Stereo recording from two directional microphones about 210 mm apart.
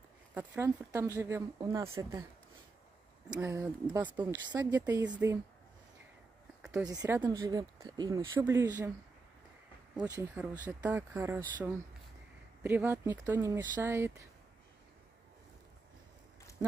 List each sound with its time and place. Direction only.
0.3 s speech: 10° right (ahead or behind)
3.3 s speech: 10° right (ahead or behind)
6.6 s a sound: 5° right (ahead or behind)
6.9 s speech: 15° right (ahead or behind)
9.9 s speech: 5° right (ahead or behind)
12.6 s speech: 10° right (ahead or behind)